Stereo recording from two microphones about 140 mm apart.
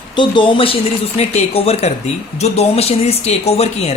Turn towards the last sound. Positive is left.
turn(degrees=45)  # may be behind; listen again after turning